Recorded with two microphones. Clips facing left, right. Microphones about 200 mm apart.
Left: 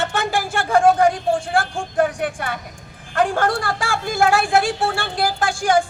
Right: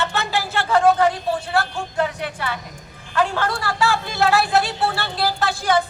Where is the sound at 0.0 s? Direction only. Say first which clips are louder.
Left 2 dB; 45° left (ahead or behind).